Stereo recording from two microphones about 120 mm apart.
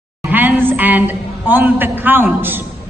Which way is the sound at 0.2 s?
15° right (ahead or behind).